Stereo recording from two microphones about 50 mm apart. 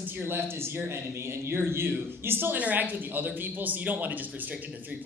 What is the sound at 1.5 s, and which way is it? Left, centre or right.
Speech, right.